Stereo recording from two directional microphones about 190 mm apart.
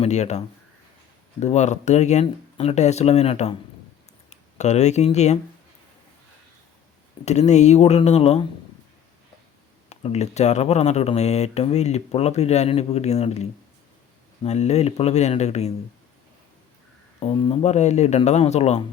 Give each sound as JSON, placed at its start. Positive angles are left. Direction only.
{"t": 0.0, "sound": "speech", "side_deg": 35}
{"t": 7.3, "sound": "speech", "side_deg": 35}
{"t": 9.9, "sound": "speech", "side_deg": 35}
{"t": 17.2, "sound": "speech", "side_deg": 30}